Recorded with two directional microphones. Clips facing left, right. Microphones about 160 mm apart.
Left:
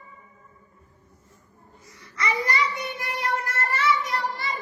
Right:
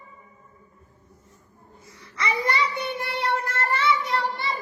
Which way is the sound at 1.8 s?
30° right (ahead or behind).